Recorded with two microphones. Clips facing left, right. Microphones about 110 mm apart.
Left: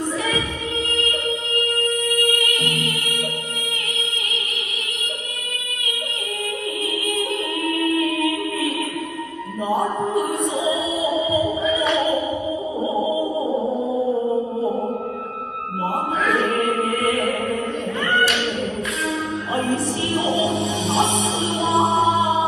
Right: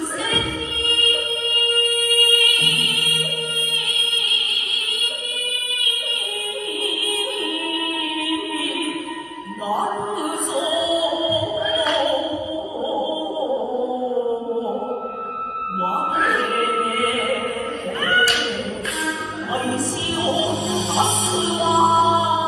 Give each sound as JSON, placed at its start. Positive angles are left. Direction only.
{"t": 2.3, "sound": "music", "side_deg": 25}
{"t": 20.3, "sound": "music", "side_deg": -30}
{"t": 21.6, "sound": "music", "side_deg": -30}